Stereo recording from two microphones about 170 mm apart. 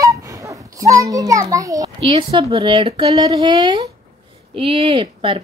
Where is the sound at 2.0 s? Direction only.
30° right (ahead or behind).